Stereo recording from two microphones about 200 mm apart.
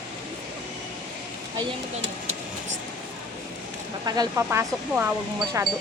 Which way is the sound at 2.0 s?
65° right (ahead or behind).